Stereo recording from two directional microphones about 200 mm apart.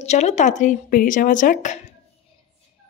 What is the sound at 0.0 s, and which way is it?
Speech, 35° left (ahead or behind).